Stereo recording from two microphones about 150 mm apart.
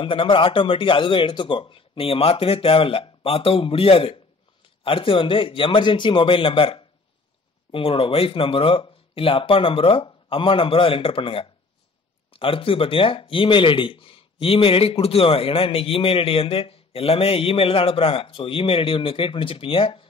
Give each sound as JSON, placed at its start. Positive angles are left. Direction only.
{"t": 0.0, "sound": "speech", "side_deg": 35}